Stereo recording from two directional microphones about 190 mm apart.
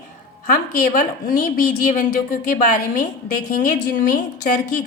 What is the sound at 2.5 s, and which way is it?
A woman's voice, 45° left (ahead or behind).